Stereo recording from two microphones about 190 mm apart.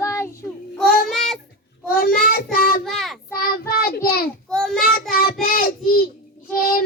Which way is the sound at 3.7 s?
55° left (ahead or behind).